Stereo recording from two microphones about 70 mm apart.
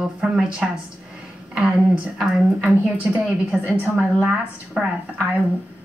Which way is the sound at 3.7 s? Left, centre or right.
Right.